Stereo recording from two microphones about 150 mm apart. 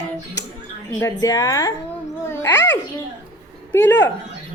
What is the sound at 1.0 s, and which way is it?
Speech, 20° left (ahead or behind).